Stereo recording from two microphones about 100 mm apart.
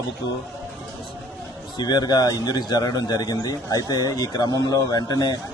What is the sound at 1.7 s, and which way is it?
A man's voice, 45° left (ahead or behind).